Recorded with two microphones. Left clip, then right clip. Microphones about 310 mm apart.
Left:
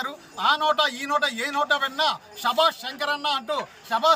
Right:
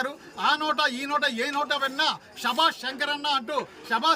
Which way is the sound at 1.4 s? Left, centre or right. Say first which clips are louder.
Left 3 dB; centre.